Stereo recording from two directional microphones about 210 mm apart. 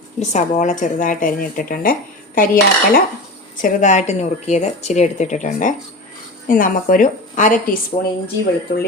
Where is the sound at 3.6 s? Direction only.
35° left (ahead or behind).